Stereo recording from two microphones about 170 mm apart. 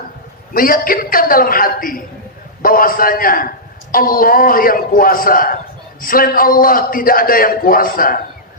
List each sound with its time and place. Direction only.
0.5 s a man's voice: 55° left (ahead or behind)